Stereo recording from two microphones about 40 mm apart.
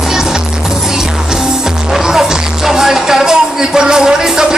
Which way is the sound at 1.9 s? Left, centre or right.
Centre.